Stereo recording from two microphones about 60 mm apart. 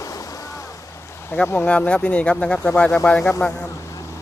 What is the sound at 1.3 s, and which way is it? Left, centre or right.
Speech, left.